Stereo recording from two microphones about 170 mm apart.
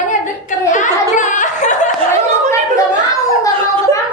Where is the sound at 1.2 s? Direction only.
45° left (ahead or behind).